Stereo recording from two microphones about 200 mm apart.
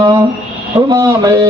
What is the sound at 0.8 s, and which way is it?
Speech, 20° right (ahead or behind).